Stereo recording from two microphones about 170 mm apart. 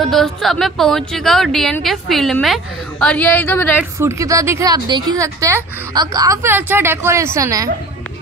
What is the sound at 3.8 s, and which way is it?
A woman's voice, 15° right (ahead or behind).